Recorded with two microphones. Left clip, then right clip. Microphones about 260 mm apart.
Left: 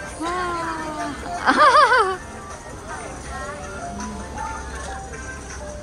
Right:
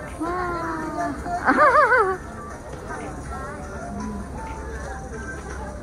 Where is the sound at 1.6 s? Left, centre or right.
Centre.